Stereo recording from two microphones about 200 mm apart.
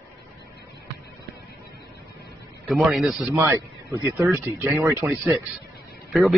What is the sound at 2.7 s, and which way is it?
Speech, centre (ahead or behind).